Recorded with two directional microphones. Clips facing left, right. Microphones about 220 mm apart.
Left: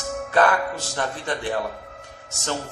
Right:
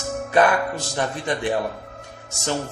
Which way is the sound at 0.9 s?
15° right (ahead or behind).